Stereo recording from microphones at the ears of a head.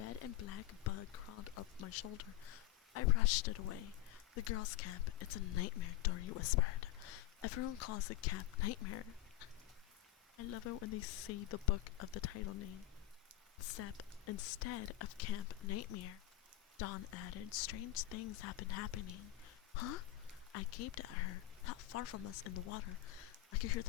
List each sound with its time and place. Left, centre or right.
0.0 s speech: left